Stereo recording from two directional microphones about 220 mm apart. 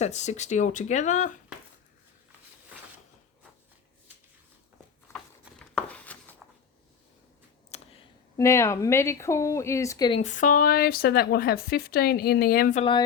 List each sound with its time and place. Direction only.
0.0 s speech: 30° left (ahead or behind)
5.1 s a sound: 5° left (ahead or behind)
7.7 s a sound: 30° left (ahead or behind)
8.4 s speech: 15° left (ahead or behind)
10.2 s speech: 35° left (ahead or behind)
12.8 s speech: 20° left (ahead or behind)